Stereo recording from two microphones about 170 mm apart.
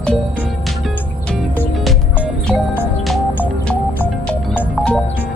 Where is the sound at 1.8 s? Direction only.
Centre (ahead or behind).